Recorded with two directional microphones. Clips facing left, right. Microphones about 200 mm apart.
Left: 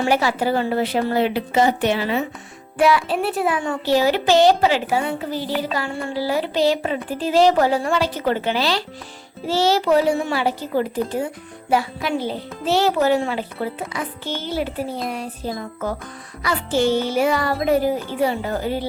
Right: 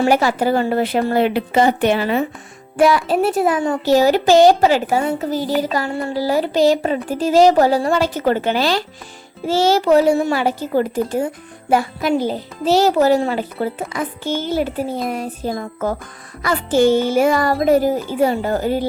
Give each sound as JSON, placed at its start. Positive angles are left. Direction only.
{"t": 0.0, "sound": "a child's voice", "side_deg": -45}